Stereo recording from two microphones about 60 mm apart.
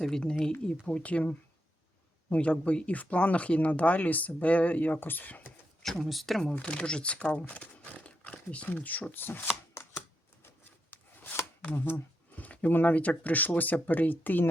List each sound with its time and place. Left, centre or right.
0.0 s speech: centre; by 5.5 s left
5.8 s speech: centre
6.5 s speech: centre; by 9.5 s left
10.9 s a sound: left
11.6 s speech: left